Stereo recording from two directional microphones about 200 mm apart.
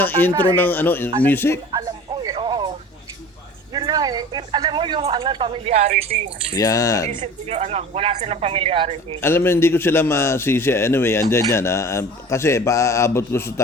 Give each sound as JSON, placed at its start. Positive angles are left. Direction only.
{"t": 0.0, "sound": "a man's voice", "side_deg": 10}
{"t": 1.7, "sound": "music", "side_deg": -20}
{"t": 3.7, "sound": "speech", "side_deg": -20}
{"t": 6.5, "sound": "a man's voice", "side_deg": 15}
{"t": 7.2, "sound": "speech", "side_deg": -35}
{"t": 9.2, "sound": "a man's voice", "side_deg": 10}